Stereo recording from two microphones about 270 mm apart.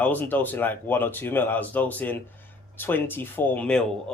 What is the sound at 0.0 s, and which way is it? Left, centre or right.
Speech, centre.